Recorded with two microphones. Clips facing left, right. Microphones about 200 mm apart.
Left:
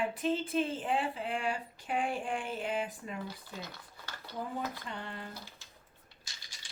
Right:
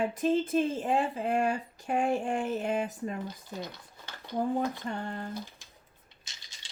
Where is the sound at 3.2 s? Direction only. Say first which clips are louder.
Right 5 dB; 20° right (ahead or behind).